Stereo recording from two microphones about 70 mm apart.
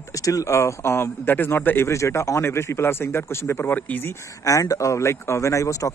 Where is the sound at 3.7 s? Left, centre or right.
Left.